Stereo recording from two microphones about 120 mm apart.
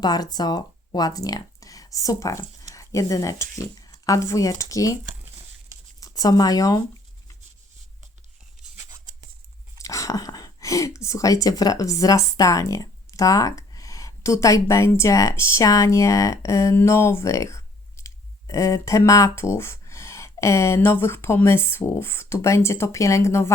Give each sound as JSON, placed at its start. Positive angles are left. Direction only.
{"t": 0.0, "sound": "speech", "side_deg": 35}
{"t": 6.0, "sound": "speech", "side_deg": 30}
{"t": 9.8, "sound": "speech", "side_deg": 25}